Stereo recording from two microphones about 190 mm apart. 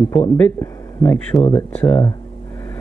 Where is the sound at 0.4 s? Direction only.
10° left (ahead or behind).